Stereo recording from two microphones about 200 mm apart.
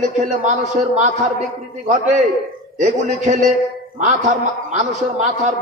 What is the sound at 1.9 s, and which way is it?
A man's voice, 35° right (ahead or behind).